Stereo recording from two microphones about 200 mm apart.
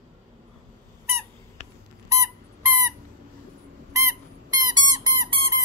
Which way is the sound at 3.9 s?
15° right (ahead or behind).